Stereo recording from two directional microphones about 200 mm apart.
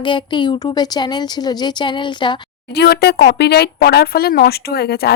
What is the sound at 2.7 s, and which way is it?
Speech, 55° left (ahead or behind).